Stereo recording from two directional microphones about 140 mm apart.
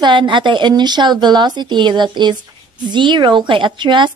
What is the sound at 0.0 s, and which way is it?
Speech, 35° right (ahead or behind).